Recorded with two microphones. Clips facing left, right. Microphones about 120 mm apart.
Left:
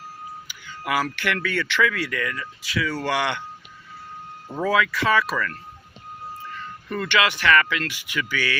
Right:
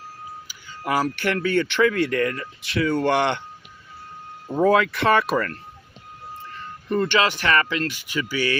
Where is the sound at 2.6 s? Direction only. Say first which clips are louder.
Right 6 dB; 55° right (ahead or behind).